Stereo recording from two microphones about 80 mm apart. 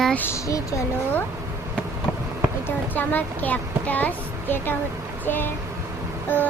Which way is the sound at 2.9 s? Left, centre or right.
Left.